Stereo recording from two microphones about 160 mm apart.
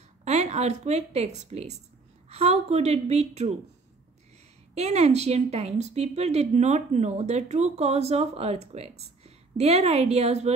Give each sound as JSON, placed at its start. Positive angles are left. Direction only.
{"t": 0.2, "sound": "a woman's voice", "side_deg": -45}
{"t": 4.7, "sound": "speech", "side_deg": -40}